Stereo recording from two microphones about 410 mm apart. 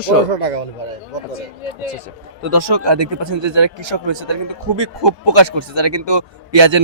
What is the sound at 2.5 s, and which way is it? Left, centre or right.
A man's voice, right.